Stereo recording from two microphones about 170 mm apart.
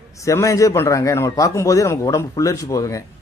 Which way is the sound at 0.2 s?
20° left (ahead or behind).